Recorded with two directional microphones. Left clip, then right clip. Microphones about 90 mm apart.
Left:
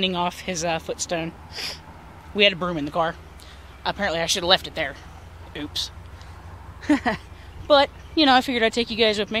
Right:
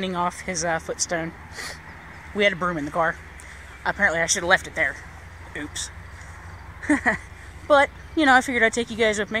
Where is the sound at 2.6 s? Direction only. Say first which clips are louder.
Right 1 dB; 20° left (ahead or behind).